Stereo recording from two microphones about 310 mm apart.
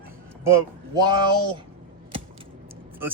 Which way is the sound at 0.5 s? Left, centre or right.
Centre.